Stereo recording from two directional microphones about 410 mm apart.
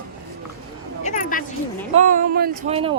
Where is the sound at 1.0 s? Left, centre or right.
Centre.